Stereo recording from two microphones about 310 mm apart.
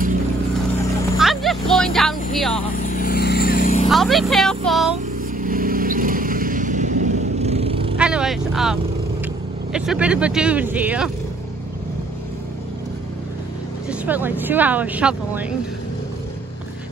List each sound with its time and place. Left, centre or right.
1.1 s vehicle: centre
2.7 s vehicle: left
3.9 s speech: centre
5.4 s vehicle: right
8.0 s speech: centre
13.8 s speech: centre